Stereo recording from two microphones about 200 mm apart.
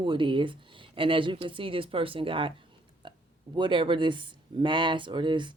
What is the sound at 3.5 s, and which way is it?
Speech, 25° right (ahead or behind).